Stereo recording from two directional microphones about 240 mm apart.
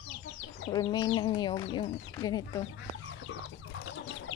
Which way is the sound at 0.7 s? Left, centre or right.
Centre.